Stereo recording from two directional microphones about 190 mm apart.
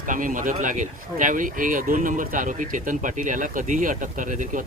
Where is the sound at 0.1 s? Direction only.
45° right (ahead or behind).